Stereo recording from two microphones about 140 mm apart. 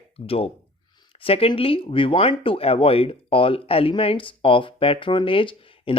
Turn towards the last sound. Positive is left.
turn(degrees=40)  # may be behind; listen again after turning